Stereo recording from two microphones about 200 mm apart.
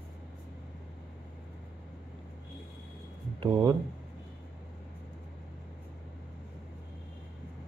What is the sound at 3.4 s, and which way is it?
Speech, 20° right (ahead or behind).